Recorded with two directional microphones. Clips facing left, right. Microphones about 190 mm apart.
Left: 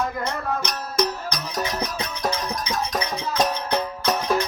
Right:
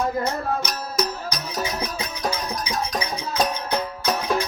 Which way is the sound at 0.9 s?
5° right (ahead or behind).